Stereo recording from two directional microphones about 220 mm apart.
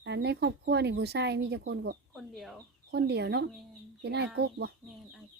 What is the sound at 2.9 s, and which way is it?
Speech, 50° right (ahead or behind).